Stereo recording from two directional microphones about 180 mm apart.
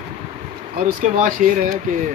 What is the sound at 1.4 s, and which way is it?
Speech, 45° right (ahead or behind).